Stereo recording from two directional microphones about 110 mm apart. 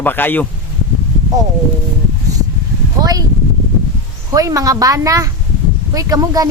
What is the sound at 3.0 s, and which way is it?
Speech, 35° right (ahead or behind).